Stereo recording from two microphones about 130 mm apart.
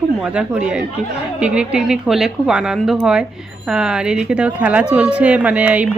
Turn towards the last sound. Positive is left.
turn(degrees=-10)  # may be behind; listen again after turning